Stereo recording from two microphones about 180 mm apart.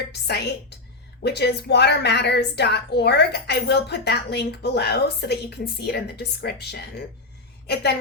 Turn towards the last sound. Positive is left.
turn(degrees=65)  # may be behind; listen again after turning